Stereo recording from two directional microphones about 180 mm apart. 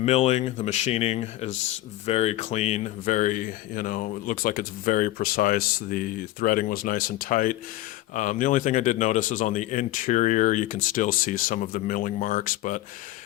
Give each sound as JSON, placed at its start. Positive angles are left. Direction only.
{"t": 0.0, "sound": "speech", "side_deg": 35}